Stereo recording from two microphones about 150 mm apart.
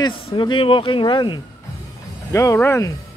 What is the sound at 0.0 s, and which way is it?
Speech, 35° left (ahead or behind).